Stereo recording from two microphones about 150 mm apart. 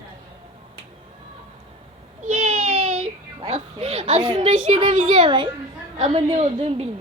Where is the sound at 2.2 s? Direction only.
50° right (ahead or behind).